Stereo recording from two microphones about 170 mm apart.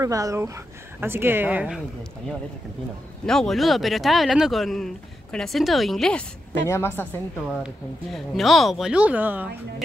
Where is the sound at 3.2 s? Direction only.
5° left (ahead or behind).